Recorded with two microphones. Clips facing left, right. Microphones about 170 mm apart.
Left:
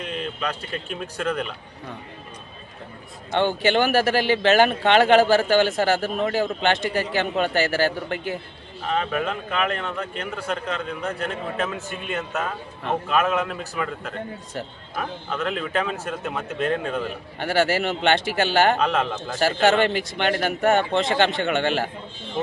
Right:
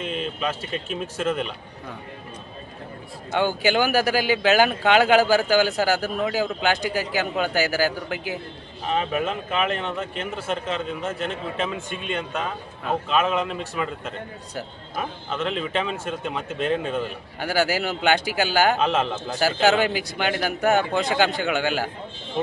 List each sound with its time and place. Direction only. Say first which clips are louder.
0.0 s speech: right 1 dB; 5° right (ahead or behind)
3.3 s speech: left 1 dB; centre (ahead or behind)
9.6 s a man's voice: right 1 dB; 25° right (ahead or behind)
11.9 s speech: even; 5° left (ahead or behind)
14.5 s speech: right 3 dB; centre (ahead or behind)